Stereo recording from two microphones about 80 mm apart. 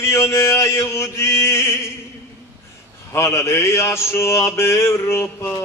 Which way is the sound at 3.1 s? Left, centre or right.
Left.